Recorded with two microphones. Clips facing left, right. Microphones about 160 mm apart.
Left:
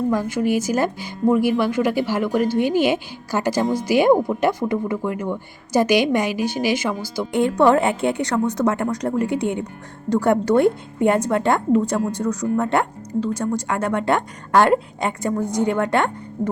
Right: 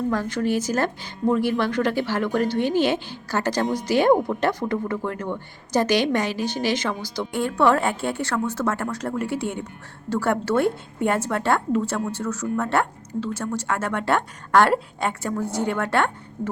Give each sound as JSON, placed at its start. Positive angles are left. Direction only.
{"t": 0.1, "sound": "a woman's voice", "side_deg": 10}